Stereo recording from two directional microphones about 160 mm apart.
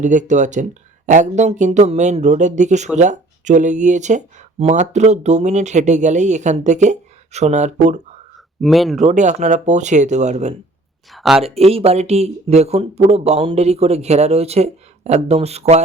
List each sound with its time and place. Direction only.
0.0 s speech: 50° right (ahead or behind)
8.6 s speech: centre (ahead or behind)
9.0 s speech: 50° right (ahead or behind)
11.1 s speech: centre (ahead or behind)
11.4 s speech: 40° right (ahead or behind)